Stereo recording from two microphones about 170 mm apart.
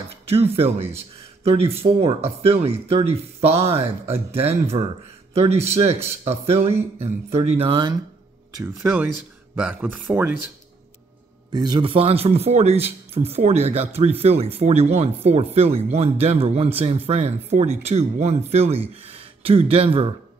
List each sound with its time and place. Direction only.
0.3 s speech: 35° right (ahead or behind)
8.5 s speech: 10° right (ahead or behind)
11.5 s speech: 25° right (ahead or behind)